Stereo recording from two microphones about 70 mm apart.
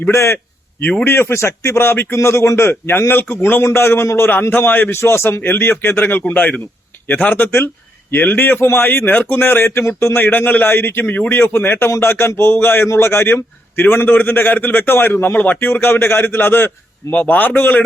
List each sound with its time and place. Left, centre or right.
0.0 s a man's voice: left
0.8 s a man's voice: centre
1.0 s a man's voice: left
8.6 s a man's voice: left
8.9 s a man's voice: left
11.3 s a man's voice: left
15.7 s a man's voice: left